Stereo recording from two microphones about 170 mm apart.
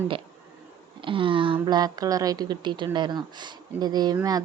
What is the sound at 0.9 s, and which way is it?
A woman's voice, 30° right (ahead or behind).